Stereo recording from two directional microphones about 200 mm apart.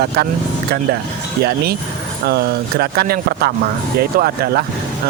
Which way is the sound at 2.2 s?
55° right (ahead or behind).